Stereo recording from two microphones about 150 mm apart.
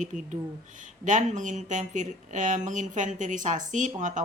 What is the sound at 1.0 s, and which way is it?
Speech, 55° right (ahead or behind).